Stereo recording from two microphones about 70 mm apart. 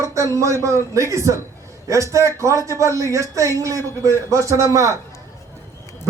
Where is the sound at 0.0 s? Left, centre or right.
Right.